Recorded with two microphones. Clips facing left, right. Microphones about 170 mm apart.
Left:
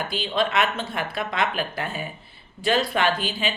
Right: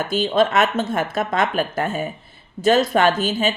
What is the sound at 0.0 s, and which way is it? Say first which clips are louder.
Speech: right 7 dB; 45° right (ahead or behind).